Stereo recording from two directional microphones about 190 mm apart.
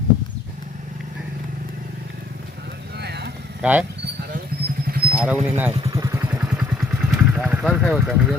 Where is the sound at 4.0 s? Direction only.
55° right (ahead or behind).